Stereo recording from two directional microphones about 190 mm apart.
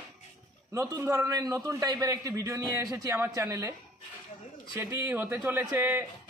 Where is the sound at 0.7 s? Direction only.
15° right (ahead or behind).